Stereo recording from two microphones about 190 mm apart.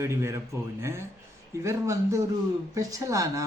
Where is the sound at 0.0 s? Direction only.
15° right (ahead or behind).